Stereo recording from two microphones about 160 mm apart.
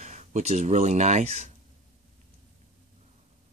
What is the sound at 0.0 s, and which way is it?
Speech, 50° right (ahead or behind).